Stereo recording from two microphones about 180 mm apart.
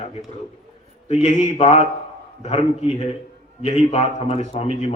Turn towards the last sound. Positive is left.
turn(degrees=35)  # may be behind; listen again after turning